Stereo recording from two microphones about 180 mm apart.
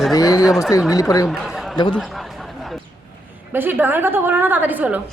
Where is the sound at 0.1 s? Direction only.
20° left (ahead or behind).